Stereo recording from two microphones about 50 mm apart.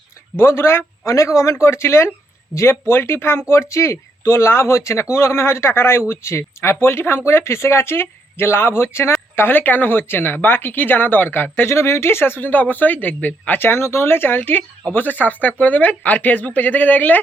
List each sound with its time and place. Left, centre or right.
0.3 s speech: left
1.5 s speech: left
3.5 s speech: left
9.3 s speech: left
11.7 s speech: left
13.8 s speech: left